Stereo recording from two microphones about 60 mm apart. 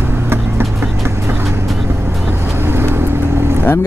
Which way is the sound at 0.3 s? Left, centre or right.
Right.